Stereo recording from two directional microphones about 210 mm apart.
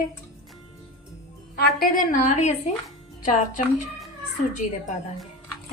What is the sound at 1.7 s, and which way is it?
Speech, 40° left (ahead or behind).